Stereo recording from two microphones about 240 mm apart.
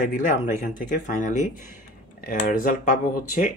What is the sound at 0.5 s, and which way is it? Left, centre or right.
Speech, left.